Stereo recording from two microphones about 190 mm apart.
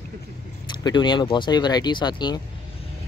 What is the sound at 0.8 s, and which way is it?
Speech, 25° left (ahead or behind).